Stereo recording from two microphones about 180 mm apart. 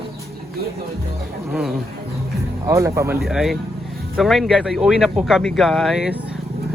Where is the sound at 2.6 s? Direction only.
15° right (ahead or behind).